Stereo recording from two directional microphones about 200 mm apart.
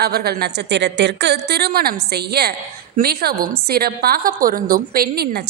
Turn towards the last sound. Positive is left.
turn(degrees=-50)  # may be behind; listen again after turning